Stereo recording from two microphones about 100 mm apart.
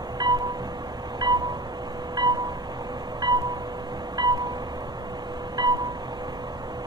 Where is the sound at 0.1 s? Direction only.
45° right (ahead or behind).